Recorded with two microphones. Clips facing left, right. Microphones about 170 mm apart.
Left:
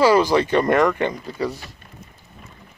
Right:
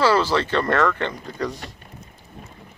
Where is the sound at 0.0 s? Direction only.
15° left (ahead or behind).